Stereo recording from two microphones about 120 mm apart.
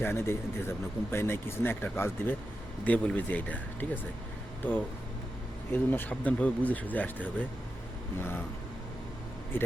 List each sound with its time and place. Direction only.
0.0 s speech: 20° left (ahead or behind)
5.7 s speech: 15° left (ahead or behind)
9.5 s speech: 15° left (ahead or behind)